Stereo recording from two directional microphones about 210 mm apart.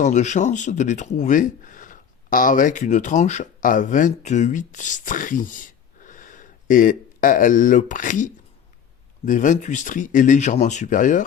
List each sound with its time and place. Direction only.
0.0 s speech: 35° left (ahead or behind)